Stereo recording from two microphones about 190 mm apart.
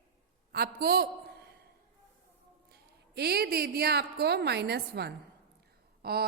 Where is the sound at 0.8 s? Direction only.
55° right (ahead or behind).